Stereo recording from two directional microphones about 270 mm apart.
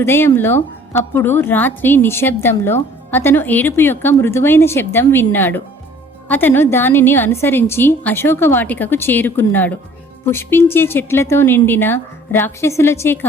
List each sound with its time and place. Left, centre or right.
0.0 s a woman's voice: centre